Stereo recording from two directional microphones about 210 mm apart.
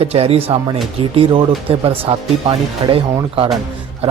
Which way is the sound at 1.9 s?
25° right (ahead or behind).